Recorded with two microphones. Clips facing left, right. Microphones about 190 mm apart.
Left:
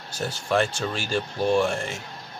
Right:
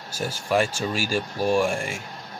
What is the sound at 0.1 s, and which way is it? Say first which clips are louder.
Speech: right 1 dB; 10° right (ahead or behind).